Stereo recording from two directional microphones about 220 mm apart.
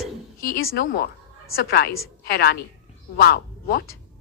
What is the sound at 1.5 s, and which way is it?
Speech, 45° left (ahead or behind).